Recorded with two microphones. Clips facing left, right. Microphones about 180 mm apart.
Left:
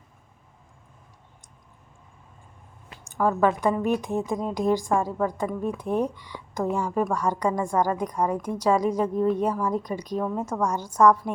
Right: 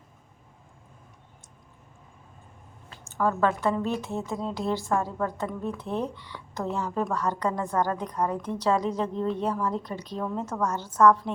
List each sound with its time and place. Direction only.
3.0 s speech: 15° left (ahead or behind)